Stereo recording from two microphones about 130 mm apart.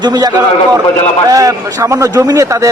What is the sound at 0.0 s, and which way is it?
A man's voice, 30° right (ahead or behind).